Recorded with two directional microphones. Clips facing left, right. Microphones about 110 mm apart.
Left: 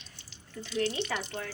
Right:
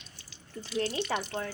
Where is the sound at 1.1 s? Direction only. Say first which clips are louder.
Right 3 dB; 35° right (ahead or behind).